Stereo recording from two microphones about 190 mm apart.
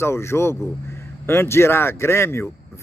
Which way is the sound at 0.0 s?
15° left (ahead or behind).